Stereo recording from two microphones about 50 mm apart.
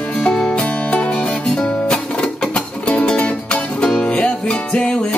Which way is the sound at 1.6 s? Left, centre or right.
Centre.